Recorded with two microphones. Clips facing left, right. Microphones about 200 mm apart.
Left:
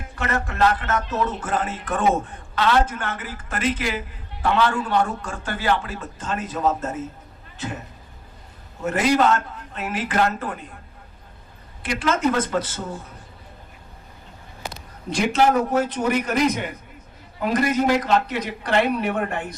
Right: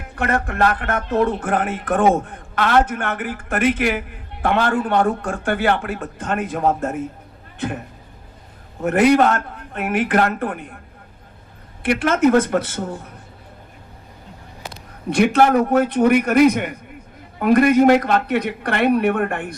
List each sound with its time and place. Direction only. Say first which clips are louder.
0.2 s speech: right 3 dB; 55° right (ahead or behind)
8.8 s speech: right 5 dB; 60° right (ahead or behind)
11.8 s speech: right 6 dB; 55° right (ahead or behind)
15.1 s speech: right 4 dB; 60° right (ahead or behind)